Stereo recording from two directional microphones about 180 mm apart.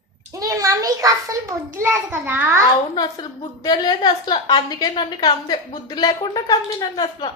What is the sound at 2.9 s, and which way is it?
A woman's voice, 20° left (ahead or behind).